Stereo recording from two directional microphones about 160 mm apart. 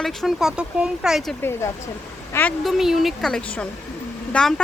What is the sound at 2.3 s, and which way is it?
Speech, 15° left (ahead or behind).